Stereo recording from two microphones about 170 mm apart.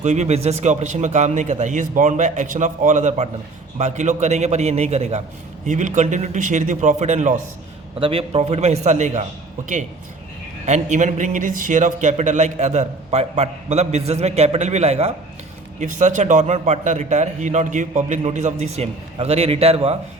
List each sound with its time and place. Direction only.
0.0 s a man's voice: 40° right (ahead or behind)
10.7 s a man's voice: 45° right (ahead or behind)